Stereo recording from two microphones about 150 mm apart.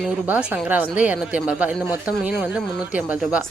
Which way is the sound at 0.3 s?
10° right (ahead or behind).